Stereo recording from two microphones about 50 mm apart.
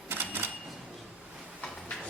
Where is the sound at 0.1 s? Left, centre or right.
Right.